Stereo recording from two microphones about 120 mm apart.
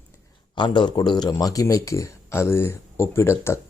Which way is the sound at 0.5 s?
40° left (ahead or behind).